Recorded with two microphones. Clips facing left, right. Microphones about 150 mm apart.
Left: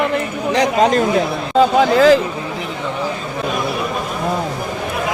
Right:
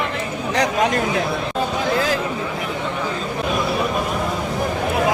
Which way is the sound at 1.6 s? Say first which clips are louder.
Left 11 dB; 90° left.